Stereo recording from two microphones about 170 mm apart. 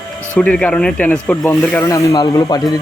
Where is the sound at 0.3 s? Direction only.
5° left (ahead or behind).